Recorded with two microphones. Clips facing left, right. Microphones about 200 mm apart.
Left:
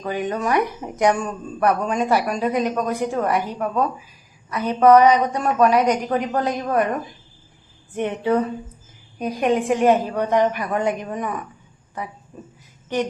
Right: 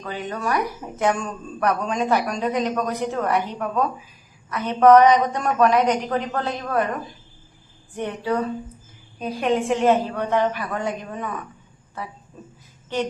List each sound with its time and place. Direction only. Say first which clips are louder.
0.0 s a woman's voice: left 4 dB; 15° left (ahead or behind)
7.9 s a woman's voice: left 4 dB; 20° left (ahead or behind)